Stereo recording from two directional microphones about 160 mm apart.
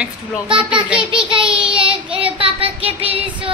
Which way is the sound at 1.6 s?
30° right (ahead or behind).